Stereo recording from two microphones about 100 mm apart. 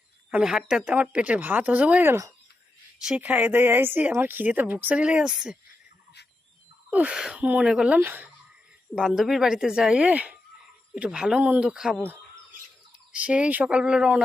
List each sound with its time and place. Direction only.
0.3 s speech: 10° right (ahead or behind)
6.9 s speech: 10° right (ahead or behind)
9.0 s a woman's voice: 5° right (ahead or behind)
13.2 s speech: 15° right (ahead or behind)